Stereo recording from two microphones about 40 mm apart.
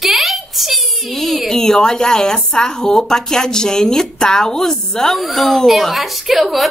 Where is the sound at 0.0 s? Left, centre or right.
Centre.